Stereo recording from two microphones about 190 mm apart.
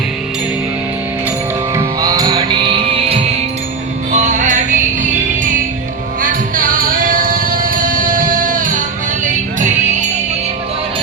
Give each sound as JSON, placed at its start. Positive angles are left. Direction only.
{"t": 1.7, "sound": "music", "side_deg": -15}
{"t": 4.1, "sound": "music", "side_deg": -40}
{"t": 6.2, "sound": "music", "side_deg": -45}